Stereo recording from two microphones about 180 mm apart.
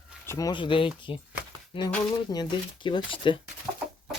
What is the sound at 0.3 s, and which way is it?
Speech, 20° left (ahead or behind).